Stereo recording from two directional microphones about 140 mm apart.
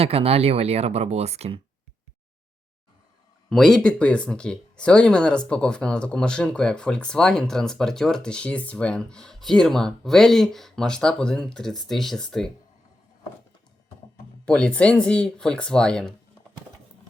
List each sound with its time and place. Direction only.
0.0 s speech: 45° right (ahead or behind)
3.5 s speech: centre (ahead or behind)
14.4 s speech: 10° left (ahead or behind)